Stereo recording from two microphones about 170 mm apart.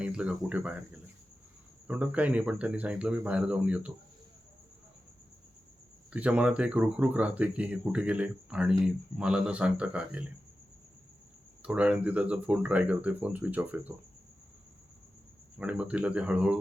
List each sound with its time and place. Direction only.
0.0 s speech: 5° right (ahead or behind)
6.1 s speech: 5° right (ahead or behind)
11.6 s speech: 5° right (ahead or behind)
15.5 s speech: 5° right (ahead or behind)